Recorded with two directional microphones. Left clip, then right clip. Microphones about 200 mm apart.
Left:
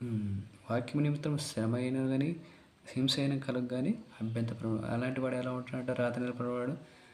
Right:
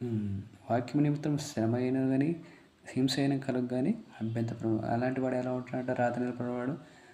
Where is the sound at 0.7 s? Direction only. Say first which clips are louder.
Right 4 dB; 15° left (ahead or behind).